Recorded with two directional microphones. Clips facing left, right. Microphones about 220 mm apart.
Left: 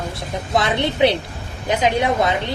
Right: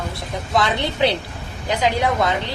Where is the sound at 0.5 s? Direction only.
20° left (ahead or behind).